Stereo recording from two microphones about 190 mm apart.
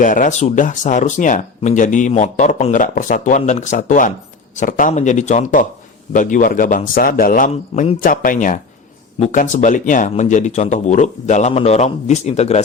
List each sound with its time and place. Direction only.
0.0 s a man's voice: 45° left (ahead or behind)